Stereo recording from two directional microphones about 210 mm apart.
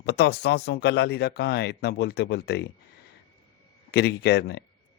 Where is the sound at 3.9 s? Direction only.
50° left (ahead or behind).